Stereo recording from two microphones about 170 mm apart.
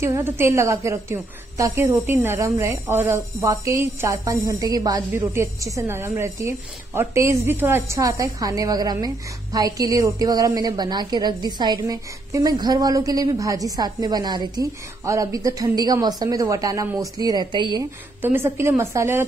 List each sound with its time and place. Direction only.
0.0 s a woman's voice: 15° right (ahead or behind)
18.2 s a woman's voice: 10° right (ahead or behind)